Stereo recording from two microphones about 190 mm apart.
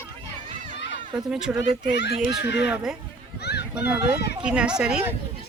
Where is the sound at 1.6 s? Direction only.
65° left (ahead or behind).